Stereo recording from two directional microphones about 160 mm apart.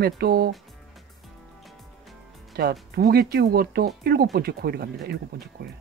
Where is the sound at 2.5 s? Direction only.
70° right (ahead or behind).